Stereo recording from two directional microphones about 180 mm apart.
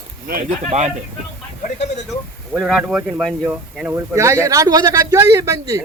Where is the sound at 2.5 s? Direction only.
Centre (ahead or behind); by 5.8 s 15° right (ahead or behind).